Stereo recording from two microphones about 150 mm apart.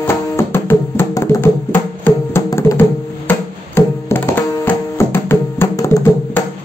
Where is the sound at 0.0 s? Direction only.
15° left (ahead or behind).